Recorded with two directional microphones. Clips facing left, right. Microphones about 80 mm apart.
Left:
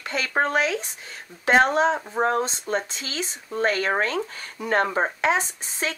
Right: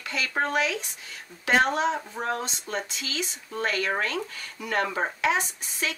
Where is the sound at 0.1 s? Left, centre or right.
Left.